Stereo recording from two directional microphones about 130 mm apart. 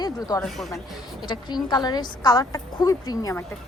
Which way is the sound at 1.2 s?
35° left (ahead or behind).